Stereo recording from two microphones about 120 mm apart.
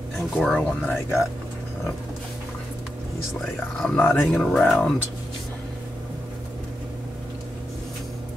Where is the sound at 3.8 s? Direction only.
15° left (ahead or behind).